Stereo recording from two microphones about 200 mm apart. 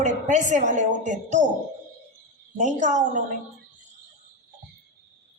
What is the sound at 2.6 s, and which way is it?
Speech, 35° right (ahead or behind).